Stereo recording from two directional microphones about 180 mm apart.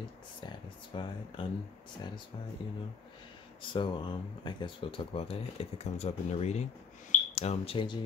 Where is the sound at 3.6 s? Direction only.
25° left (ahead or behind).